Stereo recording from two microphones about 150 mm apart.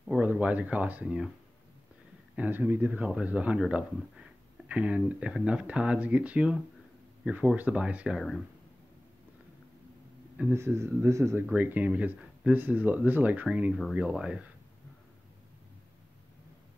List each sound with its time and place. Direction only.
0.0 s speech: 5° right (ahead or behind)
2.3 s speech: 10° right (ahead or behind)
10.3 s speech: 10° right (ahead or behind)